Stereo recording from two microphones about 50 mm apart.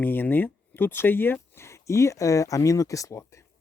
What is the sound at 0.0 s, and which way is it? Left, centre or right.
Speech, left.